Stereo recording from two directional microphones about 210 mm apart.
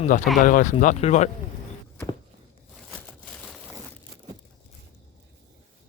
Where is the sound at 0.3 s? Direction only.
40° left (ahead or behind).